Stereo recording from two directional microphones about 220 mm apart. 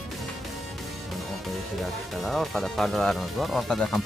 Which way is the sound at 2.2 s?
Centre (ahead or behind).